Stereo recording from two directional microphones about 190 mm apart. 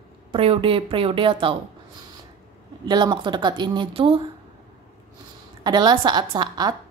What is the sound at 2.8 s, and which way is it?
Speech, 25° right (ahead or behind).